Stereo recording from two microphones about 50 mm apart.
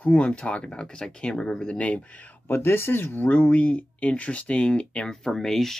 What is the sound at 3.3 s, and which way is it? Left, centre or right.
Speech, left.